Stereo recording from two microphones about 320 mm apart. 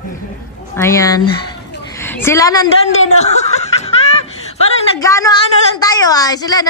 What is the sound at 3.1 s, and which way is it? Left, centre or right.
Snicker, left.